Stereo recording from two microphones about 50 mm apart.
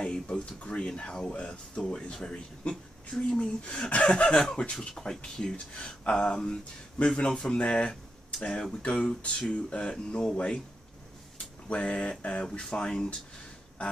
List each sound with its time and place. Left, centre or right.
0.0 s speech: left
11.7 s speech: left